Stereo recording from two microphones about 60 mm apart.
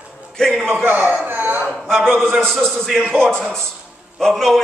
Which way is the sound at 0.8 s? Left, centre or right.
Right.